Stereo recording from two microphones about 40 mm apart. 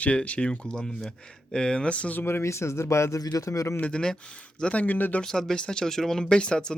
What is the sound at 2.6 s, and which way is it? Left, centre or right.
Speech, left.